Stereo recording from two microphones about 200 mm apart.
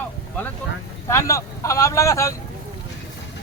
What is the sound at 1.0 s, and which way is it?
Speech, 15° left (ahead or behind).